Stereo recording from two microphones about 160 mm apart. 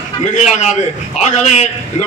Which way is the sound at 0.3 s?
45° left (ahead or behind).